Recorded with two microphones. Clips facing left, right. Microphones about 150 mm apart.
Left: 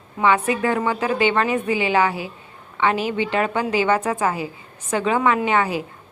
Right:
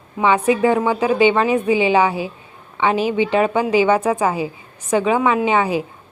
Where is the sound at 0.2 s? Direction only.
15° right (ahead or behind).